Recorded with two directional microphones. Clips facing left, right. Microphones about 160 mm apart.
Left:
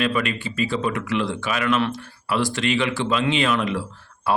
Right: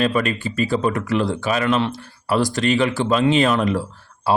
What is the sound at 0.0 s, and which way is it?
Speech, 40° right (ahead or behind).